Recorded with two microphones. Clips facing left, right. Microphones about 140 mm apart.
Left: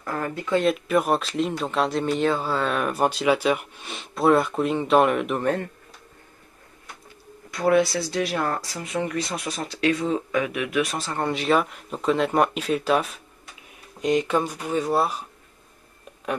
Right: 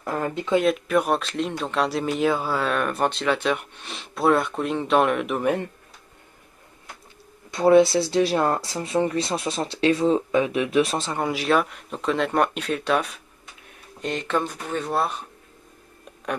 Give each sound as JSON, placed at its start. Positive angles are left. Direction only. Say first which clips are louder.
{"t": 0.0, "sound": "speech", "louder": "right 2 dB", "side_deg": -20}
{"t": 0.6, "sound": "speech", "louder": "even", "side_deg": 0}
{"t": 7.5, "sound": "speech", "louder": "right 4 dB", "side_deg": -25}
{"t": 11.1, "sound": "speech", "louder": "left 1 dB", "side_deg": -5}